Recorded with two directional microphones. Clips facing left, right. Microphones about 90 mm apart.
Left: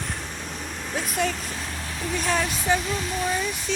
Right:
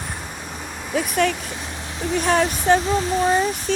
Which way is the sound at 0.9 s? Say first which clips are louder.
Right 6 dB; 60° right (ahead or behind).